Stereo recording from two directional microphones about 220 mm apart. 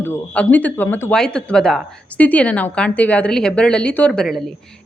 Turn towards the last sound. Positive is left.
turn(degrees=0)  # may be behind; listen again after turning